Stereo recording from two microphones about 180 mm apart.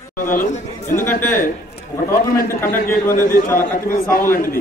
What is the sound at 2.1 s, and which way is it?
Speech, 50° left (ahead or behind).